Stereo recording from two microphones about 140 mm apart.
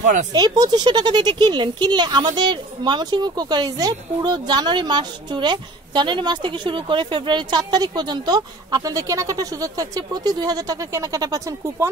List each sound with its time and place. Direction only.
0.0 s speech: 65° right (ahead or behind)
0.3 s a child's voice: 30° right (ahead or behind)